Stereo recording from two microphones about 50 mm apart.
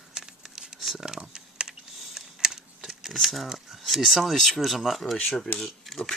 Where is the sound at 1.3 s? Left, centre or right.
Centre.